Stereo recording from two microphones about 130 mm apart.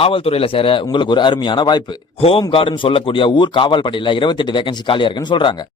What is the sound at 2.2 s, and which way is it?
Speech, 50° left (ahead or behind).